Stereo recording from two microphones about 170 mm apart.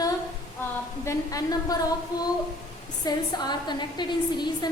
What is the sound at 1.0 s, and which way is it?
A woman's voice, 20° left (ahead or behind).